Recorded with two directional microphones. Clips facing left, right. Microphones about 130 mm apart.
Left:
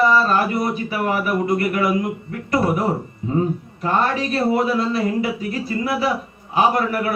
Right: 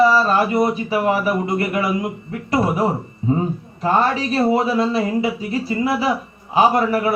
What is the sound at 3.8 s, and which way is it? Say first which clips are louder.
Speech: right 2 dB; 25° right (ahead or behind).